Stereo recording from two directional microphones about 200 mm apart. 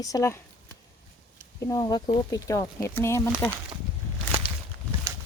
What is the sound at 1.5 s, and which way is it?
Speech, 15° left (ahead or behind).